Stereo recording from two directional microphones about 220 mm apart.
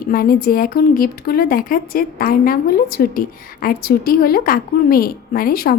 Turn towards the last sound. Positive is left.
turn(degrees=40)  # may be behind; listen again after turning